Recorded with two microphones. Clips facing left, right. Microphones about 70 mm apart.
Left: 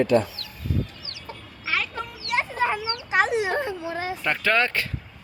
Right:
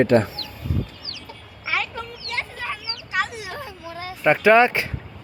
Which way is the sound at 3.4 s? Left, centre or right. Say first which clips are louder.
Left 9 dB; left.